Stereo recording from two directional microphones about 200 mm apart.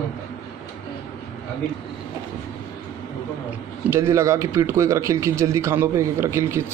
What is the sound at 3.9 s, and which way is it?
Speech, 15° right (ahead or behind).